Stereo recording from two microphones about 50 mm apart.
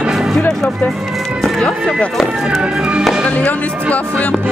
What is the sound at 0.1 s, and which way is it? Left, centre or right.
Music, centre.